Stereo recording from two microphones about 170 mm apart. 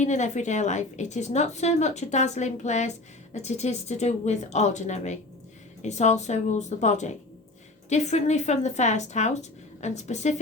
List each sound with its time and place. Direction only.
0.0 s a woman's voice: 45° left (ahead or behind)